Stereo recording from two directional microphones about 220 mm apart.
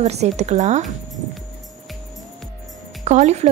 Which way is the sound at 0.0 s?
30° right (ahead or behind).